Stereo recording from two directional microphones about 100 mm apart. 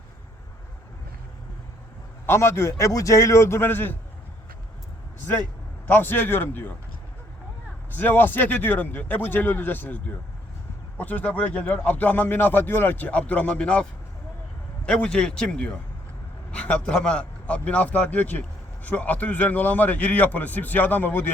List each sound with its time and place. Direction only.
2.2 s speech: 25° left (ahead or behind)
5.9 s speech: 20° left (ahead or behind)
7.9 s speech: 20° left (ahead or behind)
14.8 s speech: 10° left (ahead or behind)